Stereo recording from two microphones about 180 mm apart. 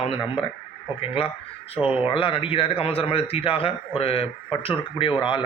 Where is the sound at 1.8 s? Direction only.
5° right (ahead or behind).